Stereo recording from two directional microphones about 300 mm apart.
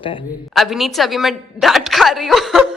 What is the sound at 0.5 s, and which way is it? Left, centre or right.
A woman's voice, centre.